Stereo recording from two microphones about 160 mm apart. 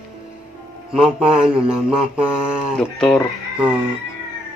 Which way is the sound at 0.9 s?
5° right (ahead or behind).